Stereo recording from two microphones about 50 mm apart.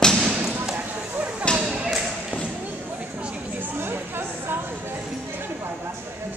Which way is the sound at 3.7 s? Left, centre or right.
Right.